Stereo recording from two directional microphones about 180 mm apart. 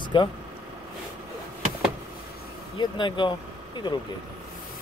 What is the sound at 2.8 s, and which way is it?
Speech, 25° left (ahead or behind).